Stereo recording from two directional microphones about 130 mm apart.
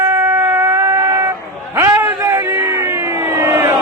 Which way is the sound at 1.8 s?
15° right (ahead or behind).